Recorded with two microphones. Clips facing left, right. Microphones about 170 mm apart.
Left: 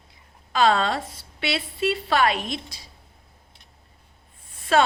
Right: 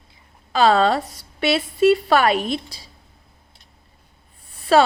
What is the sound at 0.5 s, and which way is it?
A woman's voice, 35° right (ahead or behind).